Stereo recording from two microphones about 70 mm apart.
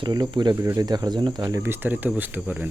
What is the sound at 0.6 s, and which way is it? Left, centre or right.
Speech, right.